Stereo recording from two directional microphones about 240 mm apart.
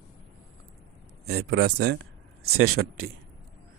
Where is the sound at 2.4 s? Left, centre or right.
Right.